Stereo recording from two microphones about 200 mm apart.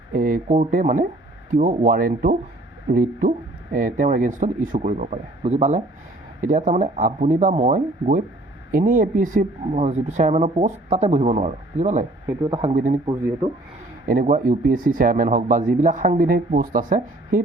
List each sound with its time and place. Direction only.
0.1 s speech: 45° right (ahead or behind)
14.1 s speech: 40° right (ahead or behind)